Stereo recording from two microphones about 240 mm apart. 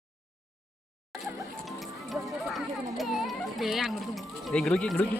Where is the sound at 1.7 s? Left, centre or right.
Centre.